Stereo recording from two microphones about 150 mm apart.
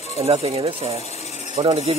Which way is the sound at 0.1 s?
45° right (ahead or behind).